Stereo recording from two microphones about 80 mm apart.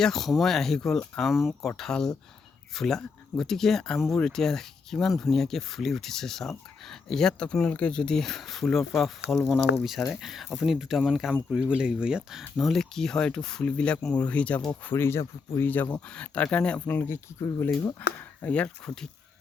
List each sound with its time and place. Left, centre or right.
0.0 s speech: centre
14.8 s speech: left
15.7 s speech: centre